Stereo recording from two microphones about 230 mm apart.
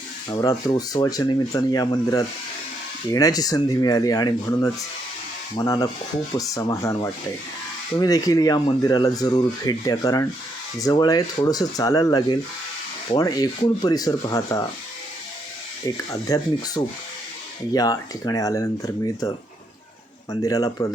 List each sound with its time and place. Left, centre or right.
0.3 s speech: centre
16.0 s speech: centre
20.4 s speech: centre